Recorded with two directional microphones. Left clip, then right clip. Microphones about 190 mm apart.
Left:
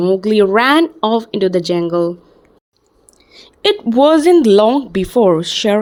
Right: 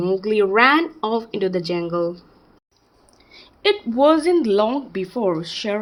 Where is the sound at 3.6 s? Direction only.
45° left (ahead or behind).